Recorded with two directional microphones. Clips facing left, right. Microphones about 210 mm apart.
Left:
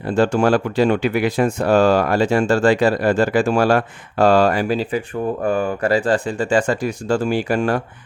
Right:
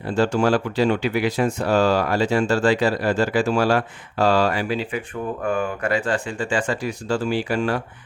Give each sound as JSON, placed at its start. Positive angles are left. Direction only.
{"t": 0.1, "sound": "speech", "side_deg": 50}